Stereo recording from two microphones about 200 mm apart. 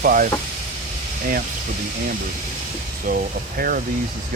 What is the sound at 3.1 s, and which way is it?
Speech, 45° right (ahead or behind).